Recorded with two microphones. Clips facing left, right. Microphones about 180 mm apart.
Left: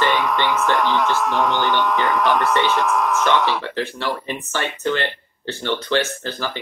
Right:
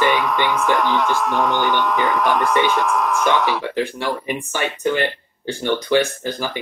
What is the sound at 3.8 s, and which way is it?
Speech, 15° right (ahead or behind).